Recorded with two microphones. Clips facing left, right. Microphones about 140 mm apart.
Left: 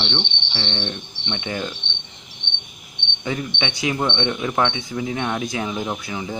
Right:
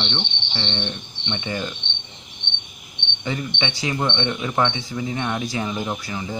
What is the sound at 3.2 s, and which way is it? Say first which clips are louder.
Speech: left 1 dB; 5° left (ahead or behind).